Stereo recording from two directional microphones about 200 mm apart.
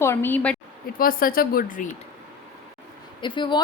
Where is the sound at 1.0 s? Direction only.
45° left (ahead or behind).